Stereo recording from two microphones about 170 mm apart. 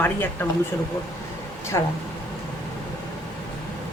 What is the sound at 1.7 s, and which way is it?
Speech, 20° left (ahead or behind).